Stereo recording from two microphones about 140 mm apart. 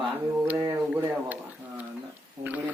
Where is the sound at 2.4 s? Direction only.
10° right (ahead or behind).